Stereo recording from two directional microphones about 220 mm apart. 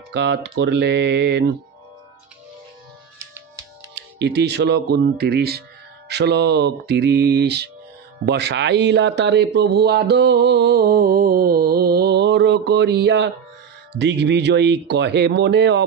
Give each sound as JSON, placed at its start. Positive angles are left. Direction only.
{"t": 0.1, "sound": "speech", "side_deg": -50}
{"t": 3.9, "sound": "speech", "side_deg": -50}